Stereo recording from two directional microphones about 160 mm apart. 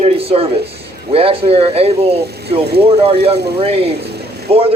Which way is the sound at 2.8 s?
35° right (ahead or behind).